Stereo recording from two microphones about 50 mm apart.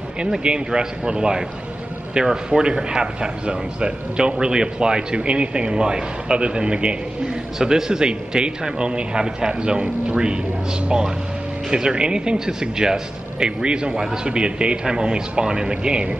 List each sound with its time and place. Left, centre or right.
0.4 s a man's voice: centre